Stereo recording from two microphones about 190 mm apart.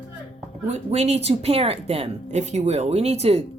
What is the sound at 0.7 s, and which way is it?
Speech, 35° right (ahead or behind).